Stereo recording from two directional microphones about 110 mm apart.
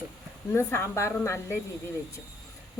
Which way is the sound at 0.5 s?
25° left (ahead or behind).